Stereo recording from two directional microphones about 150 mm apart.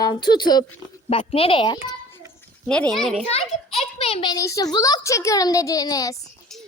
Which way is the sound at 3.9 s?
40° left (ahead or behind).